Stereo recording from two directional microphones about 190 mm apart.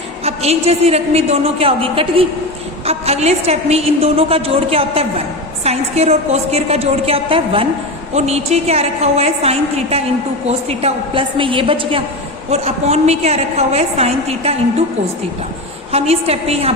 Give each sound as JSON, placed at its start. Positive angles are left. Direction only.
{"t": 0.3, "sound": "a woman's voice", "side_deg": -35}
{"t": 15.9, "sound": "a woman's voice", "side_deg": -30}